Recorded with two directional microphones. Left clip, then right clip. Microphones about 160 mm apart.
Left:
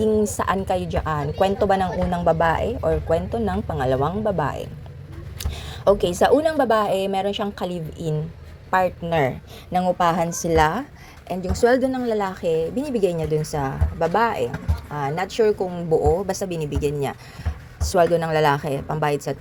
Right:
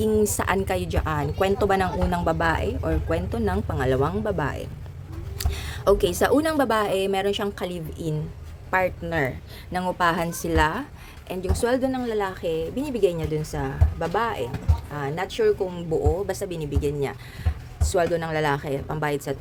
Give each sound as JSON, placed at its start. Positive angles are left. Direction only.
{"t": 0.0, "sound": "a woman's voice", "side_deg": -10}
{"t": 9.0, "sound": "a woman's voice", "side_deg": 20}
{"t": 9.8, "sound": "a woman's voice", "side_deg": 0}
{"t": 10.4, "sound": "a woman's voice", "side_deg": 10}